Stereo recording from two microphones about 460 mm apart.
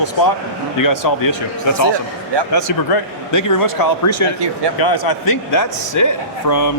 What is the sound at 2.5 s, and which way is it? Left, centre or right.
Speech, left.